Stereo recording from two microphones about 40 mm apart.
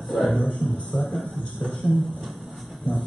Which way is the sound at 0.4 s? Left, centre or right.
Left.